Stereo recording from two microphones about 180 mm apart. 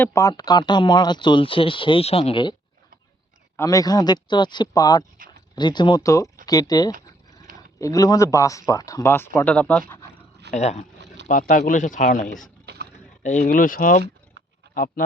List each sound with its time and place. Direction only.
0.0 s speech: 15° left (ahead or behind)
3.6 s speech: 20° left (ahead or behind)
9.9 s a sound: 10° left (ahead or behind)
10.5 s speech: 40° left (ahead or behind)
12.6 s a sound: 65° right (ahead or behind)
13.2 s speech: 45° left (ahead or behind)